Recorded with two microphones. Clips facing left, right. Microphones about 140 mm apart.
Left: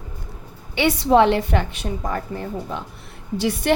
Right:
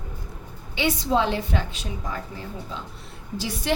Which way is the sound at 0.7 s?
65° left (ahead or behind).